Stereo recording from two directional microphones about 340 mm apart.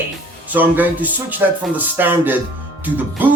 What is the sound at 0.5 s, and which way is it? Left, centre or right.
A man's voice, centre.